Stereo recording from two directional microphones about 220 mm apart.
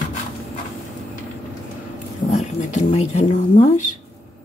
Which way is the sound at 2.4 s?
30° left (ahead or behind).